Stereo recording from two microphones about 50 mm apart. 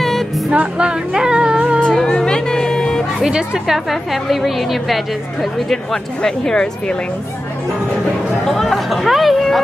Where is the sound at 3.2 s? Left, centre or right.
Centre.